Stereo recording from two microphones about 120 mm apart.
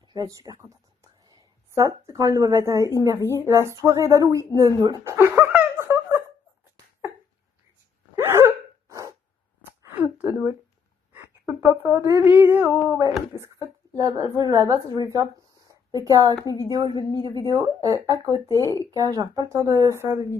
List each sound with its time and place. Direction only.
0.1 s a woman's voice: 35° right (ahead or behind)
5.0 s a sound: 20° right (ahead or behind)
8.2 s hiccup: 20° right (ahead or behind)
9.7 s a sound: 20° right (ahead or behind)
11.9 s a woman's voice: 20° right (ahead or behind)
13.4 s a woman's voice: 30° right (ahead or behind)